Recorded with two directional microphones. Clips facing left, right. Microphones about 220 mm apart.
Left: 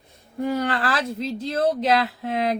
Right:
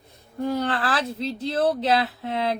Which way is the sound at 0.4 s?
10° left (ahead or behind).